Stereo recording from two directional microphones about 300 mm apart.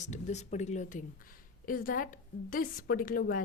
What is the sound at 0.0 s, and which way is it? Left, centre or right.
A woman's voice, left.